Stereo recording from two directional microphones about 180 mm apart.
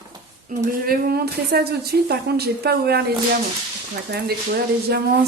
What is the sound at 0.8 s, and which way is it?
A woman's voice, 60° right (ahead or behind).